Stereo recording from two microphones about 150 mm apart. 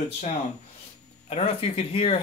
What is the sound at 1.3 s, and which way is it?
Speech, 40° left (ahead or behind).